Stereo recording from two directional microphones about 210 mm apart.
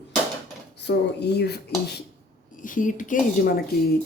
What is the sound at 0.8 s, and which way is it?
Speech, 55° left (ahead or behind).